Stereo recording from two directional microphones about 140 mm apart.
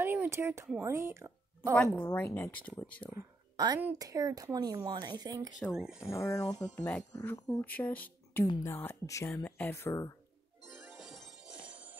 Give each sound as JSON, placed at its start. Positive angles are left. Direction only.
{"t": 0.0, "sound": "a sound", "side_deg": -15}
{"t": 0.8, "sound": "a woman's voice", "side_deg": -20}
{"t": 1.8, "sound": "speech", "side_deg": 10}
{"t": 3.1, "sound": "speech", "side_deg": -25}
{"t": 5.6, "sound": "speech", "side_deg": -5}
{"t": 5.9, "sound": "speech", "side_deg": 20}
{"t": 7.2, "sound": "speech", "side_deg": 25}
{"t": 7.4, "sound": "speech", "side_deg": 10}
{"t": 11.0, "sound": "music", "side_deg": 0}